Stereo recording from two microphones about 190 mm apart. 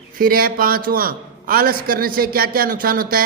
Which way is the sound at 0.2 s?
50° right (ahead or behind).